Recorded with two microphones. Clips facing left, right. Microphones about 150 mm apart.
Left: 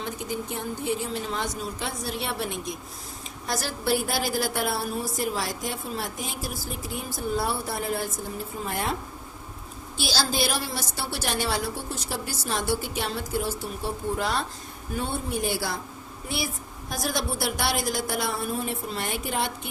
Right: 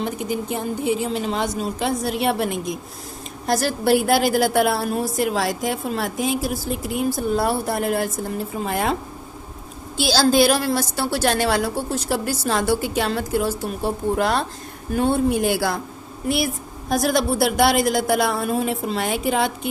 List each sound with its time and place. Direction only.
0.0 s a woman's voice: 90° right; by 8.1 s 70° right (ahead or behind)
8.6 s a woman's voice: 90° right
10.0 s a woman's voice: 90° right
13.8 s a woman's voice: 65° right (ahead or behind); by 15.8 s 90° right
16.9 s a woman's voice: 90° right